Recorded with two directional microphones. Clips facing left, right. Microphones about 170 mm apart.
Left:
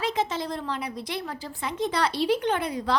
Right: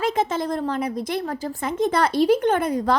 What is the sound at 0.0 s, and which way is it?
Speech, 50° right (ahead or behind).